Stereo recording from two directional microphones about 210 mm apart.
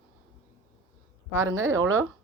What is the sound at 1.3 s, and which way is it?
Speech, 75° right (ahead or behind).